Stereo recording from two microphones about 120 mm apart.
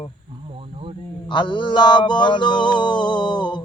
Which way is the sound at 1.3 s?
40° left (ahead or behind).